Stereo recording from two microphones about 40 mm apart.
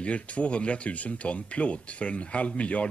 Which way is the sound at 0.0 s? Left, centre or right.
Left.